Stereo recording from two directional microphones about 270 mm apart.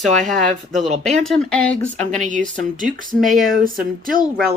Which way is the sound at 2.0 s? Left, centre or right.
Right.